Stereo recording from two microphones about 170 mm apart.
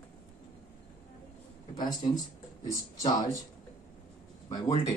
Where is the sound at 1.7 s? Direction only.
20° left (ahead or behind).